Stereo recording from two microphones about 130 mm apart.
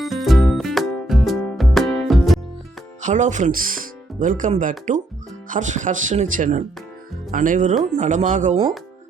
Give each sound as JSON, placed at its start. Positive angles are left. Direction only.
{"t": 0.0, "sound": "music", "side_deg": 0}
{"t": 3.0, "sound": "speech", "side_deg": -70}
{"t": 5.5, "sound": "speech", "side_deg": -75}
{"t": 7.9, "sound": "speech", "side_deg": -70}